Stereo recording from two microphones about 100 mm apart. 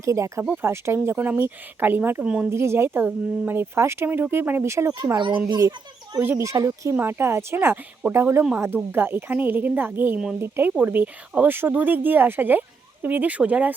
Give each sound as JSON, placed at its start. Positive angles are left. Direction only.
{"t": 0.0, "sound": "speech", "side_deg": -30}
{"t": 2.2, "sound": "speech", "side_deg": -10}
{"t": 2.5, "sound": "speech", "side_deg": -25}
{"t": 6.4, "sound": "speech", "side_deg": -30}